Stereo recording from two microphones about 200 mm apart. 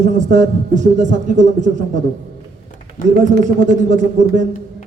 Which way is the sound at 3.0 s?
40° left (ahead or behind).